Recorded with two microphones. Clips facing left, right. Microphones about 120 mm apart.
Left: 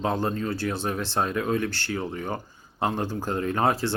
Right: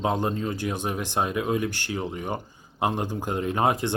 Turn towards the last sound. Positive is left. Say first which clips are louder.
# even
turn(degrees=-20)  # may be behind; listen again after turning